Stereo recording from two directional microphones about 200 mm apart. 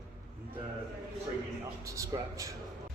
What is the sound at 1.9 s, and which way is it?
Speech, 15° right (ahead or behind).